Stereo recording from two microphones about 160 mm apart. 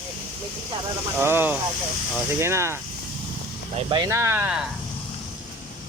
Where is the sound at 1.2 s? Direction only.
15° right (ahead or behind).